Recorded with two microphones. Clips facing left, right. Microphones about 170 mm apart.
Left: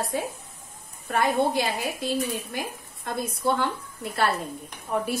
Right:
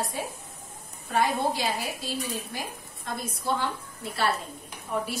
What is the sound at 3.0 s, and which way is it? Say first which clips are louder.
Speech: left 5 dB; 60° left (ahead or behind).